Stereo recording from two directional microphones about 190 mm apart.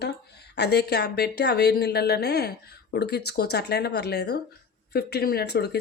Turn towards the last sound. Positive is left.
turn(degrees=60)  # may be behind; listen again after turning